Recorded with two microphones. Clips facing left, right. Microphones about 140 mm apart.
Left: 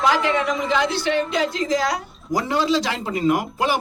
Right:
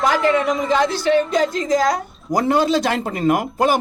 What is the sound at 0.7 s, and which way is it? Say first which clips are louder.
A woman's voice: right 6 dB; 45° right (ahead or behind).